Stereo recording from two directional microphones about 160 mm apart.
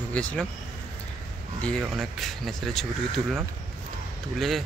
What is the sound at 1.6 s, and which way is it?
Speech, 5° left (ahead or behind).